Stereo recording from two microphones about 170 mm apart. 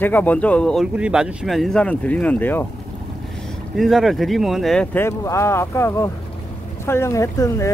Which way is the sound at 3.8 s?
Centre (ahead or behind).